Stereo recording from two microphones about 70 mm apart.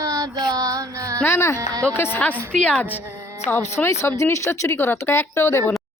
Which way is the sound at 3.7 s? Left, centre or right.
Left.